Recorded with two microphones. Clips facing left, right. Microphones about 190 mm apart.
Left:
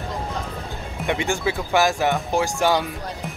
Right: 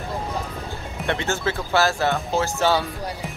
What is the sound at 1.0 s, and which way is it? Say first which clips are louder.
Speech: left 1 dB; 15° left (ahead or behind).